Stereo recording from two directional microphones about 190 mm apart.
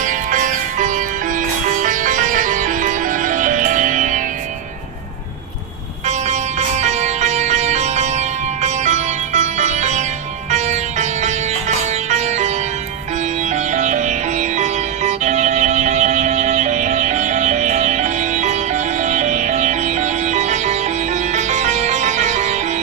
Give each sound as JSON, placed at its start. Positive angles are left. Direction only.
{"t": 0.0, "sound": "music", "side_deg": -40}
{"t": 6.1, "sound": "music", "side_deg": -40}
{"t": 13.5, "sound": "music", "side_deg": -40}